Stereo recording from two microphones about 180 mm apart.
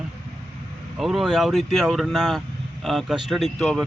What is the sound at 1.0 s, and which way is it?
A man's voice, centre (ahead or behind).